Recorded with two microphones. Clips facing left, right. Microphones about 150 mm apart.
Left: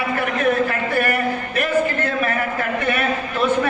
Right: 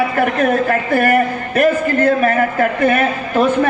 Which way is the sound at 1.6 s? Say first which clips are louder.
Right 7 dB; 40° right (ahead or behind).